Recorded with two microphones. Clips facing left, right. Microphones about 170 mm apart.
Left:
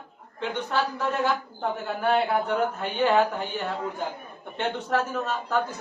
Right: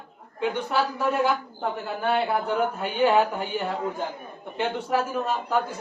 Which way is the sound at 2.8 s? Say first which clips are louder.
Right 2 dB; 10° right (ahead or behind).